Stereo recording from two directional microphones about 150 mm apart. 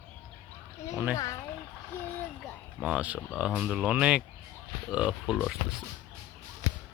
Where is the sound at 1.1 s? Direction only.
25° left (ahead or behind).